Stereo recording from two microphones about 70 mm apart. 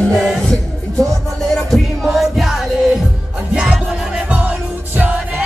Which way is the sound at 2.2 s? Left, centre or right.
Centre.